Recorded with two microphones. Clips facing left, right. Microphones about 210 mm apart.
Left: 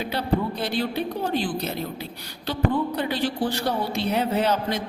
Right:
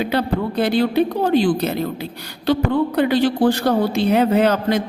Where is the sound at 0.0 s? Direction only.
80° right.